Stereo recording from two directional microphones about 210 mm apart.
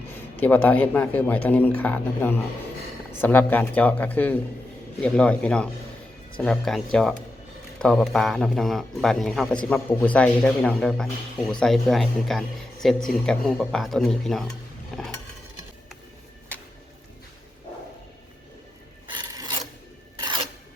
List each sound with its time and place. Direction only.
0.1 s a man's voice: 10° left (ahead or behind)
14.9 s stir: centre (ahead or behind)
19.1 s filing: 20° right (ahead or behind)